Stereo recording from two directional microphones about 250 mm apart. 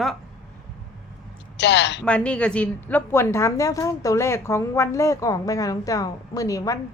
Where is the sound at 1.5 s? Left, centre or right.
Left.